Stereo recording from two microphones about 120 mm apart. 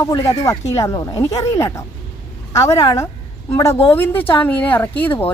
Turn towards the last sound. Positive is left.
turn(degrees=15)  # may be behind; listen again after turning